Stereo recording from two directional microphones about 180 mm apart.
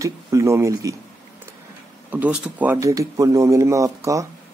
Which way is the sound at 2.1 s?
10° right (ahead or behind).